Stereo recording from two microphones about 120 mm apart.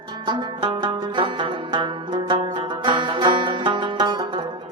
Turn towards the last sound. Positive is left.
turn(degrees=-35)  # may be behind; listen again after turning